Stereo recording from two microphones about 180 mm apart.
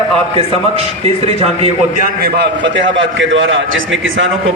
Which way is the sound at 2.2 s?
65° right (ahead or behind).